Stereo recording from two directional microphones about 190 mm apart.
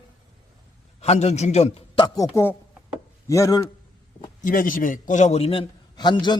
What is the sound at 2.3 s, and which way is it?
Speech, 10° left (ahead or behind).